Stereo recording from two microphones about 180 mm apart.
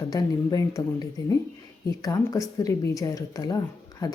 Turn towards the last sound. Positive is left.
turn(degrees=20)  # may be behind; listen again after turning